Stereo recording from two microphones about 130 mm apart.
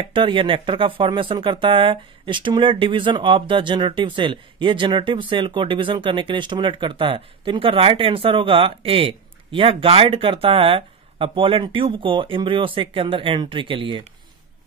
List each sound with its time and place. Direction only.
0.1 s speech: 40° right (ahead or behind)